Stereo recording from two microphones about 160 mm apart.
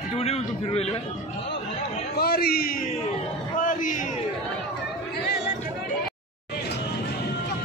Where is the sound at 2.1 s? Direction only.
70° left (ahead or behind).